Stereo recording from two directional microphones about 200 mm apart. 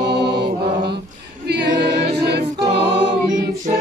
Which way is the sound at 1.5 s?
55° right (ahead or behind).